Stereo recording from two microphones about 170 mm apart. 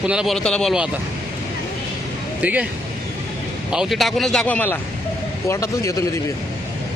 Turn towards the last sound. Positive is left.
turn(degrees=20)  # may be behind; listen again after turning